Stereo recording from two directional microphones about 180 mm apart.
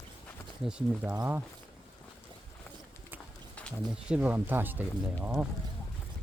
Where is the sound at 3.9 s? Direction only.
5° right (ahead or behind).